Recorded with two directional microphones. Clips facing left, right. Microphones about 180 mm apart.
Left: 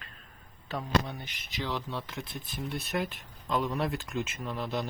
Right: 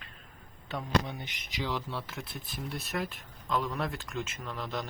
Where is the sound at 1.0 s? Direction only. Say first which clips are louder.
Even; 15° right (ahead or behind); by 3.1 s centre (ahead or behind).